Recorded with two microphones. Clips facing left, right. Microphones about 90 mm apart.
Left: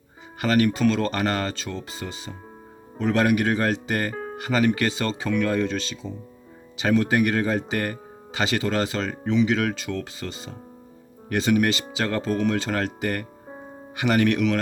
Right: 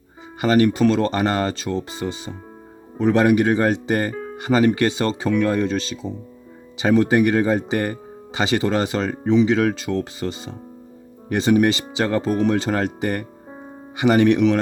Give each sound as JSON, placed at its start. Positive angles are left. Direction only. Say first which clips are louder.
{"t": 0.4, "sound": "speech", "louder": "right 4 dB", "side_deg": -25}